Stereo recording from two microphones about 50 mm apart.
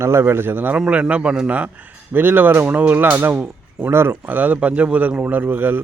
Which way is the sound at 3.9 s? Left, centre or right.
Right.